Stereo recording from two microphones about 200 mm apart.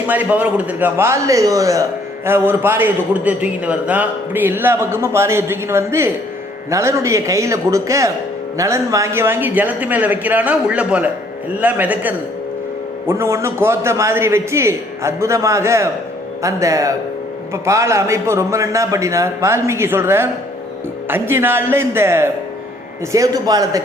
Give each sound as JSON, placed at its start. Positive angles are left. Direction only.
{"t": 0.1, "sound": "a man's voice", "side_deg": -5}